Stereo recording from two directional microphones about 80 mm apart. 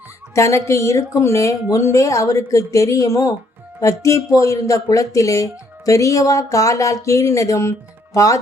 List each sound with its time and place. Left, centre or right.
0.3 s speech: left